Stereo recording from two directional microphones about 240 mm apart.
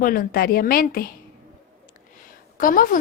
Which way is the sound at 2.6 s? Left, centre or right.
Left.